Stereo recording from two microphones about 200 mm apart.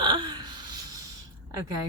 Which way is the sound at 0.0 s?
20° right (ahead or behind).